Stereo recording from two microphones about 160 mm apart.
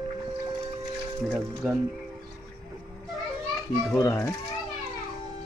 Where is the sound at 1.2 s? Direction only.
Centre (ahead or behind).